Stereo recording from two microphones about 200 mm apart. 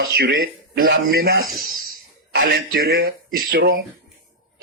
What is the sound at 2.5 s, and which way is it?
A man's voice, 50° right (ahead or behind).